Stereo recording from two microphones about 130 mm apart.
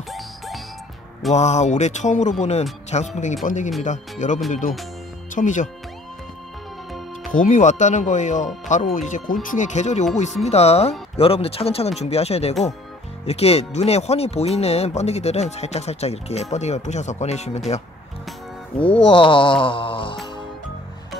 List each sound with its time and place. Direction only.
1.3 s speech: 60° left (ahead or behind)
3.4 s speech: 70° left (ahead or behind)
4.5 s speech: 80° left
7.2 s speech: 75° left (ahead or behind); by 17.8 s 50° left (ahead or behind)
19.0 s mantra: 40° left (ahead or behind)